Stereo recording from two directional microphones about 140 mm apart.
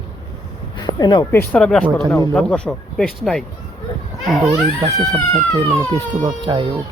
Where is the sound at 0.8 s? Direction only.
30° left (ahead or behind).